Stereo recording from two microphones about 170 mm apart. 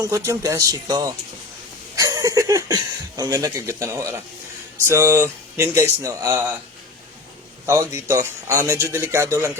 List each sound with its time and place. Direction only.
0.3 s a man's voice: 20° right (ahead or behind)
7.7 s a man's voice: 15° right (ahead or behind)